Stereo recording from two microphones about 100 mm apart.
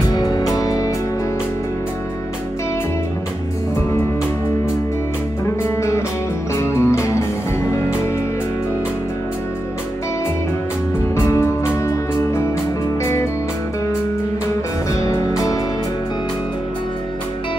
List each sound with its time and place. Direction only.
0.1 s music: 40° left (ahead or behind)
5.8 s music: 30° left (ahead or behind)
11.2 s music: 30° left (ahead or behind)
15.0 s music: 30° left (ahead or behind)